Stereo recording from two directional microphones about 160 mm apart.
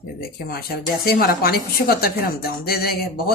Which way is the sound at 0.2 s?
70° left (ahead or behind).